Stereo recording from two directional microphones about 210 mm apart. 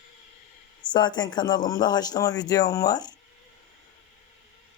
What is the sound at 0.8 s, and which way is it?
Speech, 20° left (ahead or behind).